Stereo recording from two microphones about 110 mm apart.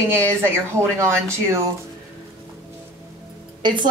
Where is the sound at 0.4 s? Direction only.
25° right (ahead or behind).